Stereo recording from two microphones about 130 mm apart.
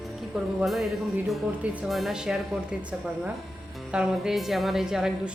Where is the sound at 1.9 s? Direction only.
Centre (ahead or behind).